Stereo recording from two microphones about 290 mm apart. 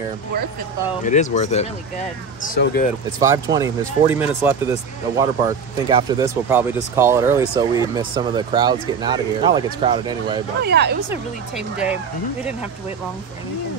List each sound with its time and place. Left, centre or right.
1.0 s speech: left
3.1 s speech: centre
10.6 s speech: right
11.1 s speech: centre